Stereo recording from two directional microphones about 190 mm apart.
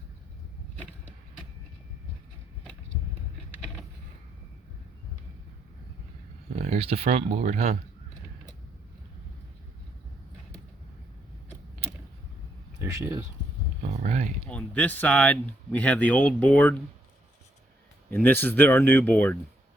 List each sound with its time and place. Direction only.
6.6 s speech: 35° right (ahead or behind)
12.8 s speech: 15° right (ahead or behind)
14.0 s a sound: 40° right (ahead or behind)
14.5 s speech: 5° left (ahead or behind)
18.1 s speech: 10° left (ahead or behind)